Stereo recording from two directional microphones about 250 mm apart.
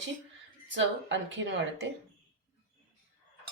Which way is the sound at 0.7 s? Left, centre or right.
Right.